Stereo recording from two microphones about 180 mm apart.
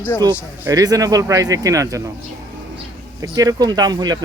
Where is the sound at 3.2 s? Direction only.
20° right (ahead or behind).